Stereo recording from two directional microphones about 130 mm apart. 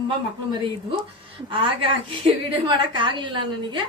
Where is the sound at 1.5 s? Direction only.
40° right (ahead or behind).